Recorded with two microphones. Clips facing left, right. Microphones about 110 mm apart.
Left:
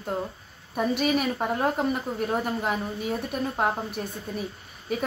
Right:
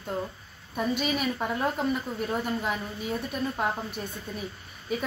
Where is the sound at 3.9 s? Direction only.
5° left (ahead or behind).